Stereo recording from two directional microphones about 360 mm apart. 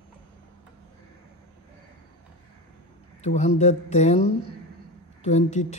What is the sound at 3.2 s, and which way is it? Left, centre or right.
A man's voice, centre.